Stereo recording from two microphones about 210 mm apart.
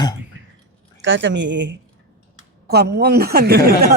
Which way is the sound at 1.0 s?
60° right (ahead or behind).